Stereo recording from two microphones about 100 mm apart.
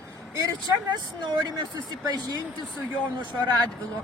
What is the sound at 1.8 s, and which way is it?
Speech, 40° right (ahead or behind).